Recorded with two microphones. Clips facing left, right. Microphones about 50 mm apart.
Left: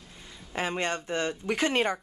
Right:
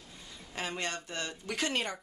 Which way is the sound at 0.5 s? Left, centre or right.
Left.